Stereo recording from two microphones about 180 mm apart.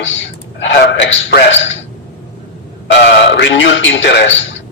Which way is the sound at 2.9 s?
70° left (ahead or behind).